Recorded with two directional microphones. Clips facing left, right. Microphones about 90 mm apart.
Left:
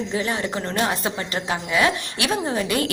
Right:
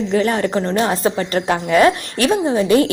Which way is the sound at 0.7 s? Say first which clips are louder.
Right 6 dB; 30° right (ahead or behind).